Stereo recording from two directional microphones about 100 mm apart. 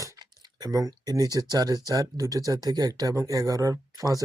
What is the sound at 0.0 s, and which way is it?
Speech, 35° right (ahead or behind).